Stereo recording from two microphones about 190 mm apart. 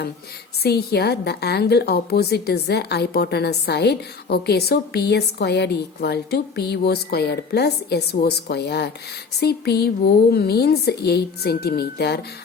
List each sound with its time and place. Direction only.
0.6 s a woman's voice: 55° left (ahead or behind)